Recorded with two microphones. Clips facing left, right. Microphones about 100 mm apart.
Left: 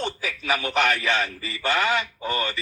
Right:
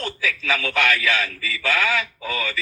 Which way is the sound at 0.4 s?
15° left (ahead or behind).